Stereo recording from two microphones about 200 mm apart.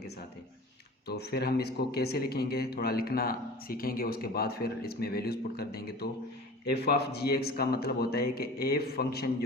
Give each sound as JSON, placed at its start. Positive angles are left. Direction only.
{"t": 1.0, "sound": "speech", "side_deg": 55}